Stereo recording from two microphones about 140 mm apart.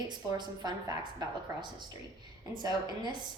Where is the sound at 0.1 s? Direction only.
30° right (ahead or behind).